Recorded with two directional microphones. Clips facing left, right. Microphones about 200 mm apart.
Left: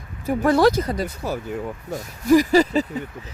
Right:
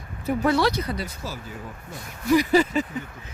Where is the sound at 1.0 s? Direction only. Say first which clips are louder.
Left 8 dB; 60° left (ahead or behind).